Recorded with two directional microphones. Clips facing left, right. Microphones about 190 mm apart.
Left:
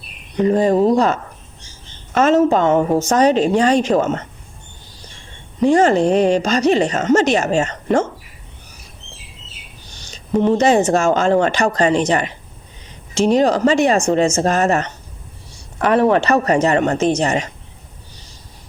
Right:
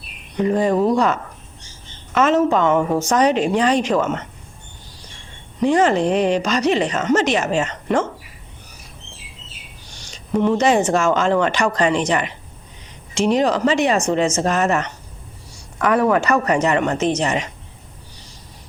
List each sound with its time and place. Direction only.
0.4 s a woman's voice: 35° left (ahead or behind)
5.6 s a woman's voice: 45° left (ahead or behind)
6.7 s a woman's voice: 45° left (ahead or behind)
10.4 s a woman's voice: 30° left (ahead or behind)
10.9 s a woman's voice: 45° left (ahead or behind)
13.2 s a woman's voice: 35° left (ahead or behind)
14.3 s a woman's voice: 30° left (ahead or behind)